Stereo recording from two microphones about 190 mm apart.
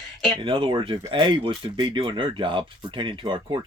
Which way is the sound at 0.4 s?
25° right (ahead or behind).